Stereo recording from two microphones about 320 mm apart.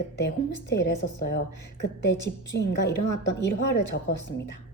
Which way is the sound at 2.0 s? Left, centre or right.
Left.